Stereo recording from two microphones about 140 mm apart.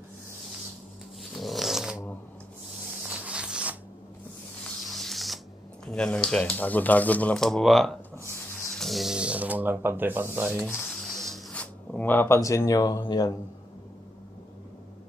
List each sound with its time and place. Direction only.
1.2 s dog: centre (ahead or behind)
3.3 s a sound: 5° right (ahead or behind)
5.9 s speech: 5° left (ahead or behind); by 10.6 s 15° right (ahead or behind)
10.6 s music: centre (ahead or behind)
12.0 s speech: 15° left (ahead or behind)